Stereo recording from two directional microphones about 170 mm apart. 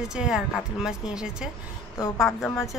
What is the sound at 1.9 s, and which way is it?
Speech, 20° left (ahead or behind).